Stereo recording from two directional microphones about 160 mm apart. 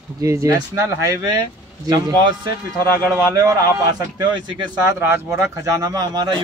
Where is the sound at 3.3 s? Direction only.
20° right (ahead or behind).